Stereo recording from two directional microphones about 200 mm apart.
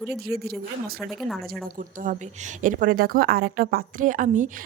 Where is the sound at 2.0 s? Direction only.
40° right (ahead or behind).